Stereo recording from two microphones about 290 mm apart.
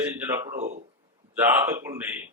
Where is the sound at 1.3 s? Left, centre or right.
Centre.